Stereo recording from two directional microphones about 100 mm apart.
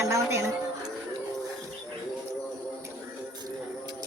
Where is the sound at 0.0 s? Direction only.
30° right (ahead or behind).